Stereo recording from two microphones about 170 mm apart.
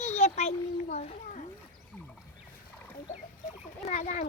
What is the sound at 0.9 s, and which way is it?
Speech, 45° left (ahead or behind).